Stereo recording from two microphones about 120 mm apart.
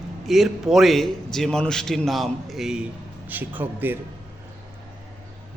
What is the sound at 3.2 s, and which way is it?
Speech, 15° right (ahead or behind).